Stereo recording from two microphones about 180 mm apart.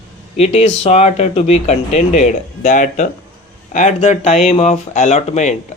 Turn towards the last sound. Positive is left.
turn(degrees=40)  # may be behind; listen again after turning